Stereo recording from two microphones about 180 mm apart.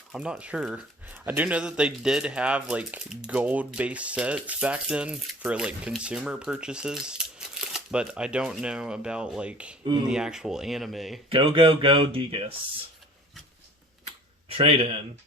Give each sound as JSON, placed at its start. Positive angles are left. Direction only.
{"t": 0.1, "sound": "speech", "side_deg": -5}
{"t": 11.3, "sound": "speech", "side_deg": -30}
{"t": 14.5, "sound": "speech", "side_deg": -30}